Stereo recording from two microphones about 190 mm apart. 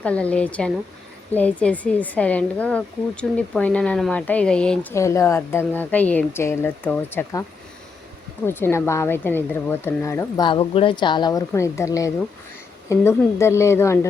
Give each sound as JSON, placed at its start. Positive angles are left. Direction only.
{"t": 0.0, "sound": "speech", "side_deg": 5}
{"t": 8.4, "sound": "speech", "side_deg": 10}